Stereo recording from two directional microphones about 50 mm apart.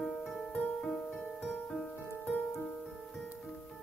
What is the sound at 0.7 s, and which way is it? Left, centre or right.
Music, centre.